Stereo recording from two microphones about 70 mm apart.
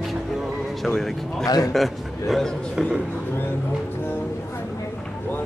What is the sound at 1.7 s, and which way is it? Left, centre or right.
A man's voice, centre.